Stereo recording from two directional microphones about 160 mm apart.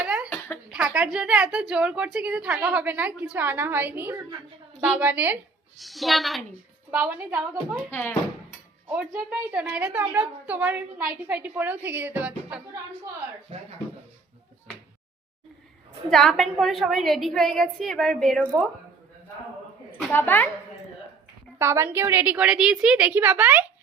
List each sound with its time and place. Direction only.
0.0 s a sound: 5° right (ahead or behind)
0.3 s a sound: 10° left (ahead or behind)
0.7 s a woman's voice: 5° right (ahead or behind)
6.9 s a woman's voice: 15° right (ahead or behind)
7.9 s a woman's voice: 15° left (ahead or behind)
8.9 s a woman's voice: 10° right (ahead or behind)
13.5 s speech: 35° right (ahead or behind)
16.0 s a woman's voice: 5° left (ahead or behind)
20.1 s a woman's voice: 15° left (ahead or behind)
21.6 s a woman's voice: 15° right (ahead or behind)